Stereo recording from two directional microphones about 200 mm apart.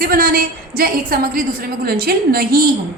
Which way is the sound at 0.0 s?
45° right (ahead or behind).